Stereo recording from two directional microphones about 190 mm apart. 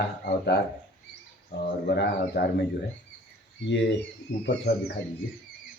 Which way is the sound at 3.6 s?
70° left (ahead or behind).